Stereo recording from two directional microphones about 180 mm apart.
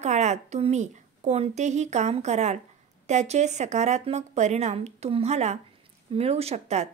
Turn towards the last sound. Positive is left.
turn(degrees=-40)  # may be behind; listen again after turning